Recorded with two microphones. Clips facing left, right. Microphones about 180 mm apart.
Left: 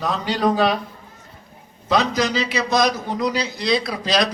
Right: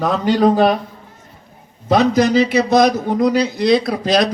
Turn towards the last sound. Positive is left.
turn(degrees=-50)  # may be behind; listen again after turning